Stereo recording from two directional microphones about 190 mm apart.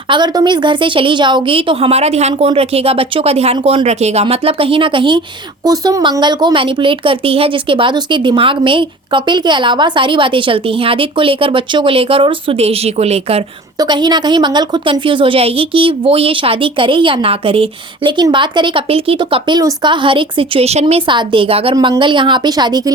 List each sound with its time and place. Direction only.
0.1 s speech: 25° right (ahead or behind)